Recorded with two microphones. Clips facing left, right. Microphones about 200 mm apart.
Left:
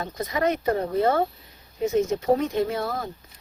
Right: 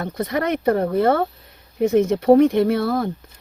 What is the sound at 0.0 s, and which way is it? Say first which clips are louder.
A woman's voice: right 2 dB; 60° right (ahead or behind).